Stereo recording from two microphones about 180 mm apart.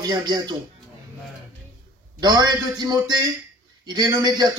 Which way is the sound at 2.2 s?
20° right (ahead or behind).